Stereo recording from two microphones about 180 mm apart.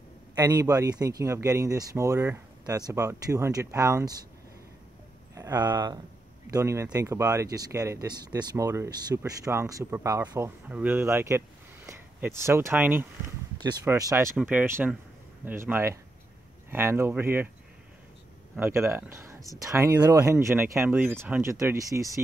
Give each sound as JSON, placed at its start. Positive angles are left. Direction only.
{"t": 0.4, "sound": "speech", "side_deg": -20}
{"t": 5.3, "sound": "speech", "side_deg": -20}
{"t": 18.6, "sound": "speech", "side_deg": -15}